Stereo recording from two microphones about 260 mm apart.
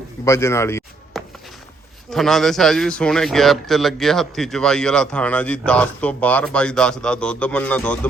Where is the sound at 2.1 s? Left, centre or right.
Centre.